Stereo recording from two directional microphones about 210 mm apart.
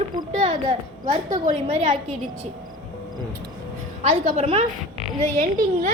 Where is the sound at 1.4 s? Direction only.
30° right (ahead or behind).